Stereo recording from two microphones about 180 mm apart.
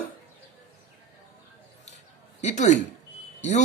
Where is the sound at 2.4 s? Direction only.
40° left (ahead or behind).